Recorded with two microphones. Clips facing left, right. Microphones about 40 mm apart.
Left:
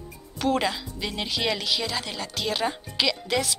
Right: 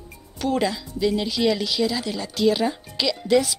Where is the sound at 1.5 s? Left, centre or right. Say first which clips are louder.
Right 4 dB; centre.